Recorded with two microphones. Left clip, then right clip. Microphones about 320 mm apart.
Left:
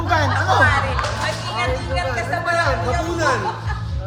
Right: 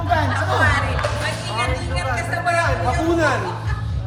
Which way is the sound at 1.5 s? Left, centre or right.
Left.